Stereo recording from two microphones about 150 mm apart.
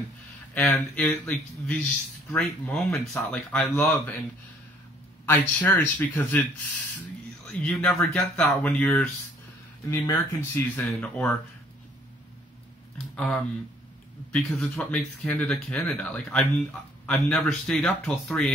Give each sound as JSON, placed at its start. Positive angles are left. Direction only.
{"t": 0.6, "sound": "speech", "side_deg": 10}
{"t": 5.2, "sound": "speech", "side_deg": 15}
{"t": 7.5, "sound": "speech", "side_deg": 5}
{"t": 13.1, "sound": "speech", "side_deg": 5}